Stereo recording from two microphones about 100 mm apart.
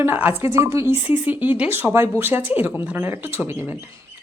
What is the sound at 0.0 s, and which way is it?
A woman's voice, 20° right (ahead or behind).